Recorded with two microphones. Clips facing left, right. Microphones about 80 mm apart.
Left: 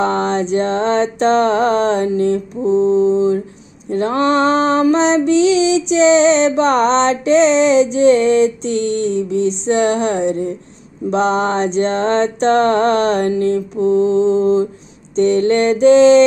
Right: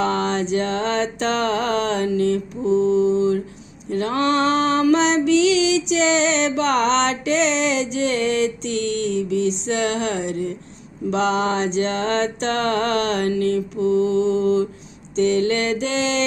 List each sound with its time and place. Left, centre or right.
0.0 s music: left
2.6 s mantra: left
3.9 s music: left